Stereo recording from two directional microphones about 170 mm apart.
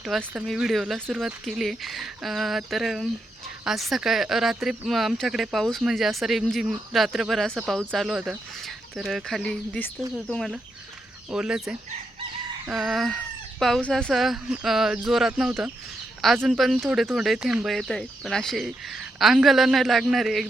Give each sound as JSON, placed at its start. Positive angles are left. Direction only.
{"t": 0.0, "sound": "speech", "side_deg": 0}
{"t": 0.9, "sound": "speech", "side_deg": -10}
{"t": 1.2, "sound": "speech", "side_deg": 0}
{"t": 12.6, "sound": "speech", "side_deg": 0}